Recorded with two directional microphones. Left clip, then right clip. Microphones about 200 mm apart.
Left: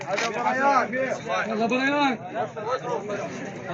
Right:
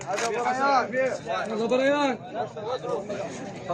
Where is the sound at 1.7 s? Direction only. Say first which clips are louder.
Right 2 dB; 45° left (ahead or behind).